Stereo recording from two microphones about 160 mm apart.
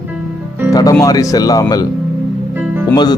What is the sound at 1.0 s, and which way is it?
Speech, 20° left (ahead or behind).